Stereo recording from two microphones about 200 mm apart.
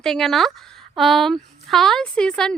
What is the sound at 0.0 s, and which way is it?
Speech, centre (ahead or behind).